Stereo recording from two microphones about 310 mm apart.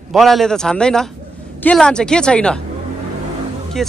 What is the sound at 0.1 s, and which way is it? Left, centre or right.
A man's voice, centre.